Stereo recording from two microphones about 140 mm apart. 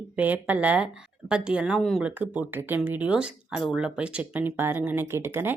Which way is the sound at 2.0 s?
10° right (ahead or behind).